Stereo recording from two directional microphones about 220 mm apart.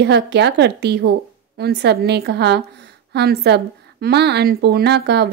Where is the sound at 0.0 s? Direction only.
50° right (ahead or behind).